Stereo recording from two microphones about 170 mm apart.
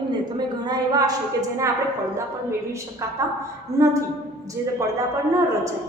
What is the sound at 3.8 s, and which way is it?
Speech, 20° right (ahead or behind).